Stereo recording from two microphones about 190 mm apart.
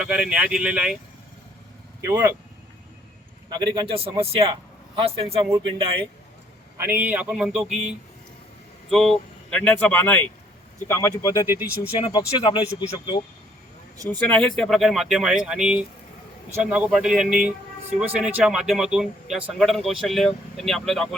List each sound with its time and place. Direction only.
0.0 s a man's voice: 5° right (ahead or behind)
2.0 s a man's voice: 15° right (ahead or behind)
3.5 s a man's voice: 25° right (ahead or behind)
5.5 s a man's voice: 15° right (ahead or behind); by 11.4 s 15° left (ahead or behind)
11.9 s speech: 30° left (ahead or behind)
14.1 s a man's voice: 5° left (ahead or behind)